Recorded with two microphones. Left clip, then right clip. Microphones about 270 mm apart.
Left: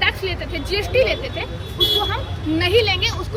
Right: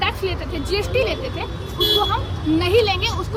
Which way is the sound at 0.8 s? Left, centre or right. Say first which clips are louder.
Left 4 dB; left.